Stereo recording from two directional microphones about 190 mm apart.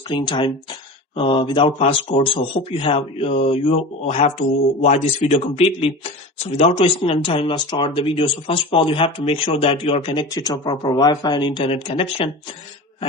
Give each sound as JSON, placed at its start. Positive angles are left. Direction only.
{"t": 0.1, "sound": "speech", "side_deg": 25}